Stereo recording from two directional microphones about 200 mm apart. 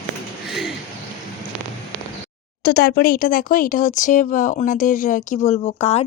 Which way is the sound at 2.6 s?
50° left (ahead or behind).